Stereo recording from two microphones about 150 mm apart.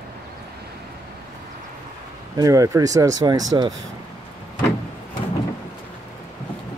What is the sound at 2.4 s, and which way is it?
Speech, 20° right (ahead or behind).